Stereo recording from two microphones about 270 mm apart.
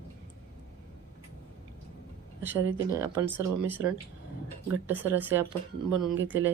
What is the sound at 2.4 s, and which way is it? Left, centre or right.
Speech, centre.